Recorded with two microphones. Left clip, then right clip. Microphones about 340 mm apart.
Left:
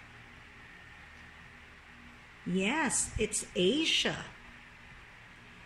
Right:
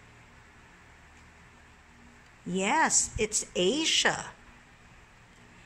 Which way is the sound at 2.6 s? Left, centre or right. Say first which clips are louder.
Right 6 dB; centre.